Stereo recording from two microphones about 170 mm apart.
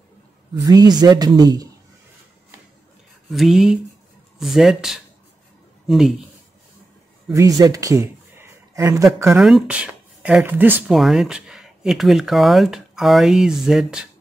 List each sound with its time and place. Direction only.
0.6 s speech: 25° right (ahead or behind)
3.3 s speech: centre (ahead or behind)
7.3 s speech: 20° right (ahead or behind)
9.4 s speech: centre (ahead or behind)